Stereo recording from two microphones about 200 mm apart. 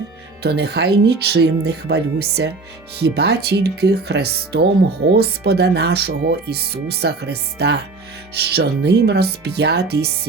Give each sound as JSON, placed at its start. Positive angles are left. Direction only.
{"t": 0.4, "sound": "speech", "side_deg": -55}